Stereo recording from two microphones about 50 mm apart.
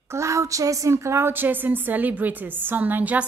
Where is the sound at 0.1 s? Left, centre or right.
Right.